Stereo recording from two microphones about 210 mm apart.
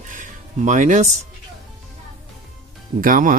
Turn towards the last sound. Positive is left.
turn(degrees=-40)  # may be behind; listen again after turning